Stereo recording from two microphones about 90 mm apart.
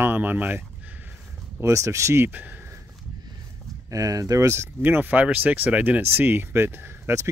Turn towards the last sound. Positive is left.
turn(degrees=-30)  # may be behind; listen again after turning